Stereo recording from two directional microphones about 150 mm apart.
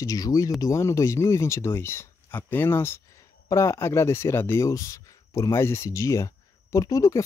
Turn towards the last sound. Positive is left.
turn(degrees=20)  # may be behind; listen again after turning